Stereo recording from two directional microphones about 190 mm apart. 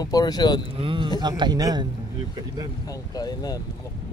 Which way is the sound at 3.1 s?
20° left (ahead or behind).